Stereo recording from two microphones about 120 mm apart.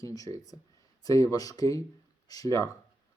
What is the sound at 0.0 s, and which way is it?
Speech, 30° left (ahead or behind).